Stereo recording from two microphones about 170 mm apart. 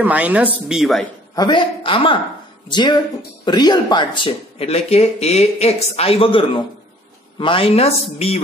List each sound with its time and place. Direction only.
0.0 s a woman's voice: 10° right (ahead or behind)
1.3 s a man's voice: 25° left (ahead or behind)